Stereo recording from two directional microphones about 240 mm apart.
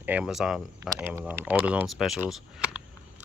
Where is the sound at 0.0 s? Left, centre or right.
Centre.